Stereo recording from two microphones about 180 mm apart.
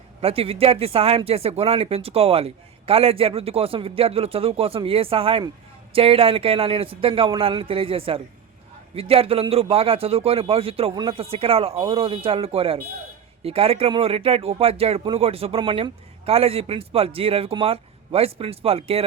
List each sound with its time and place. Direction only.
0.2 s speech: 35° right (ahead or behind)